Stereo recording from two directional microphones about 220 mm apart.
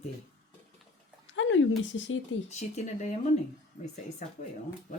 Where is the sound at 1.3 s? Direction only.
60° left (ahead or behind).